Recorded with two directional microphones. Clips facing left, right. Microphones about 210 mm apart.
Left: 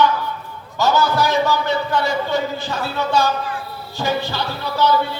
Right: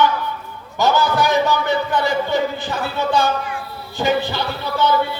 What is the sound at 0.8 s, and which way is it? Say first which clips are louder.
A man's voice: even; 15° right (ahead or behind).